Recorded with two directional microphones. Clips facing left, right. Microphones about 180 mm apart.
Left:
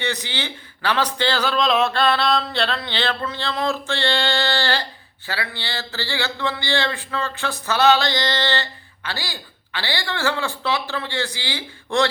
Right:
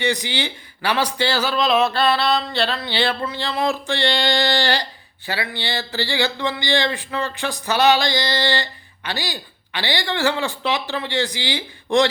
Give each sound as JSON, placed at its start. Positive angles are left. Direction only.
{"t": 0.0, "sound": "speech", "side_deg": -15}